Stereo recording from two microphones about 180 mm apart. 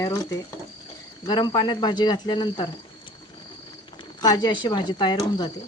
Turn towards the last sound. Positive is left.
turn(degrees=25)  # may be behind; listen again after turning